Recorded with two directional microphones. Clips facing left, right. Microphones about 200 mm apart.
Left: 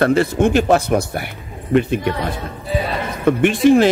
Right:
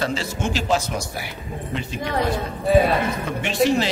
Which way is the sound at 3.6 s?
50° left (ahead or behind).